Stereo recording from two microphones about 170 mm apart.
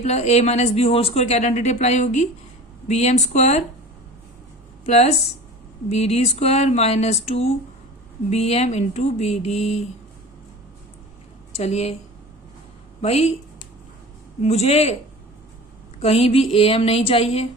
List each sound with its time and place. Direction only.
0.0 s speech: 40° left (ahead or behind)
4.9 s speech: 40° left (ahead or behind)
11.5 s speech: 40° left (ahead or behind)
13.0 s speech: 40° left (ahead or behind)
14.4 s speech: 40° left (ahead or behind)
16.0 s speech: 40° left (ahead or behind)